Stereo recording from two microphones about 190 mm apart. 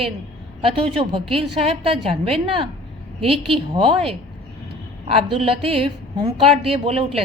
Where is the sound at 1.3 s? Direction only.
30° right (ahead or behind).